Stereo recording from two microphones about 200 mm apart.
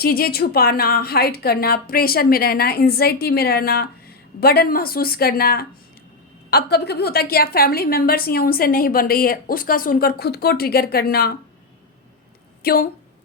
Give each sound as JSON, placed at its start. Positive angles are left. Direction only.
{"t": 0.0, "sound": "a woman's voice", "side_deg": 50}
{"t": 12.6, "sound": "a woman's voice", "side_deg": 45}